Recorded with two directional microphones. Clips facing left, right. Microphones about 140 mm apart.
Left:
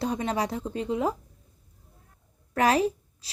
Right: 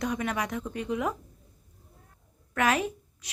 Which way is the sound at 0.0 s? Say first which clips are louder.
Left 2 dB; 30° left (ahead or behind).